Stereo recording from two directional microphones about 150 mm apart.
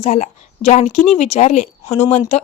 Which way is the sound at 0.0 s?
55° left (ahead or behind).